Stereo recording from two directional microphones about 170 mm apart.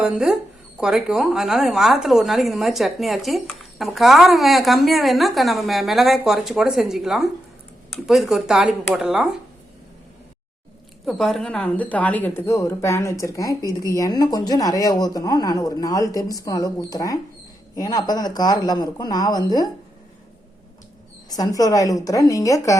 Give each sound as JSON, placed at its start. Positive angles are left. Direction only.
{"t": 0.0, "sound": "a woman's voice", "side_deg": -5}
{"t": 11.0, "sound": "a woman's voice", "side_deg": 0}
{"t": 21.2, "sound": "speech", "side_deg": 20}